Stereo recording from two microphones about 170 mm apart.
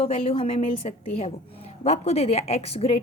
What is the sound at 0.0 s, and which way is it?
A woman's voice, 35° left (ahead or behind).